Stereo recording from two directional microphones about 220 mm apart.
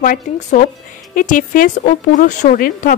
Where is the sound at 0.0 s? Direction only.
35° left (ahead or behind).